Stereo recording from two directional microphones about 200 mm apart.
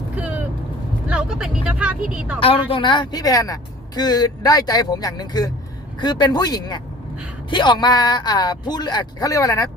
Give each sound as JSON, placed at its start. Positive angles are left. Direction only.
{"t": 0.2, "sound": "vehicle", "side_deg": -5}
{"t": 1.0, "sound": "speech", "side_deg": -5}
{"t": 2.4, "sound": "speech", "side_deg": 25}